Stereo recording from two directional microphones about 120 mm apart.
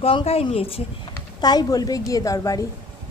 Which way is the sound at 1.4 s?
35° left (ahead or behind).